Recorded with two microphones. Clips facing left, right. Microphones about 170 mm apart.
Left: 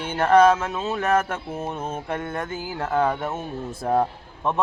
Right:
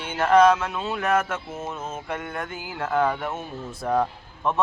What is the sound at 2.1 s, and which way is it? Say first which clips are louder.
Speech: left 2 dB; 30° left (ahead or behind).